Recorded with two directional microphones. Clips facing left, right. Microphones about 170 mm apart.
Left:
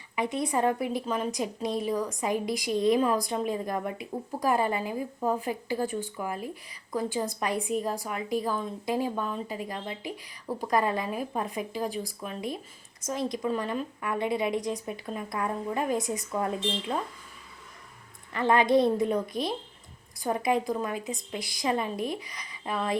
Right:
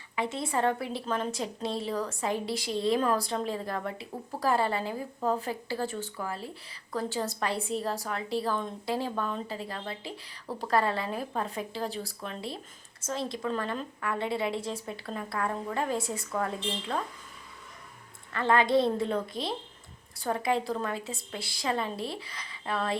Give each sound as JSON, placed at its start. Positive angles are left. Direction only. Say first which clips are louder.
{"t": 0.3, "sound": "a woman's voice", "louder": "left 2 dB", "side_deg": 15}
{"t": 18.3, "sound": "a woman's voice", "louder": "left 2 dB", "side_deg": 15}